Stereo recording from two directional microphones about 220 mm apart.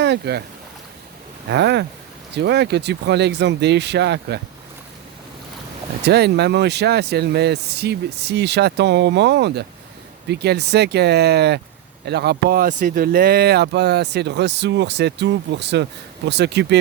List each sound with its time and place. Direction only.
0.0 s speech: 50° right (ahead or behind)
1.5 s speech: 50° right (ahead or behind)
6.1 s speech: 50° right (ahead or behind)